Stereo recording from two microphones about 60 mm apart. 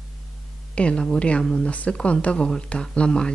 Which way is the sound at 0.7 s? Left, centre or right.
Centre.